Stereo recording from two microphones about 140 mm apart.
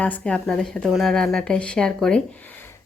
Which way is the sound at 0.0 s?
10° left (ahead or behind).